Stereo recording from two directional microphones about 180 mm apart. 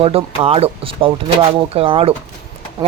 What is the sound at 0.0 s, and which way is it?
Speech, 35° right (ahead or behind).